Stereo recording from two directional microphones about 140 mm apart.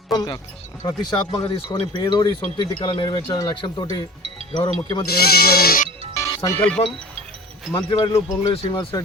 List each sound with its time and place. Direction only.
0.1 s speech: 25° left (ahead or behind)
1.5 s speech: 40° left (ahead or behind)
5.0 s speech: 90° left
6.1 s speech: 25° left (ahead or behind)
7.8 s speech: 35° left (ahead or behind)